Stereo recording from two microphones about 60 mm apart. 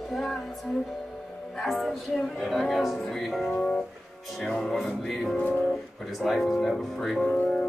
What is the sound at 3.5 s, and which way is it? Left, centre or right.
Music, centre.